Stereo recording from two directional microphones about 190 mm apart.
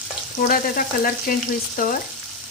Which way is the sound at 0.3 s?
45° left (ahead or behind).